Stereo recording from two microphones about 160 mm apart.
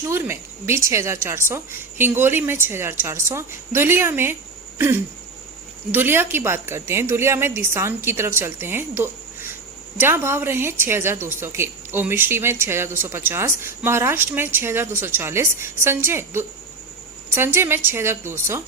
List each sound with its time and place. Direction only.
0.0 s a woman's voice: 15° right (ahead or behind)